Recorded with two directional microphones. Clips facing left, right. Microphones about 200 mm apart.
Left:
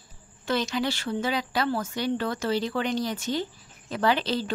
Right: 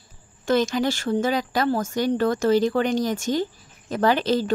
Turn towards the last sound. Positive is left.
turn(degrees=-45)  # may be behind; listen again after turning